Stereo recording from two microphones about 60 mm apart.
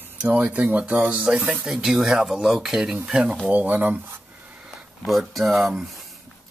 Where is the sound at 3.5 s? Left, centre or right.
Right.